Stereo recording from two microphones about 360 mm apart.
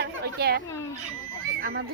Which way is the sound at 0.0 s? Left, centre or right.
Right.